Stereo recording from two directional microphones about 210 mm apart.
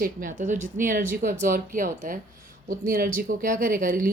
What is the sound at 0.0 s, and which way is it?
Speech, 40° right (ahead or behind).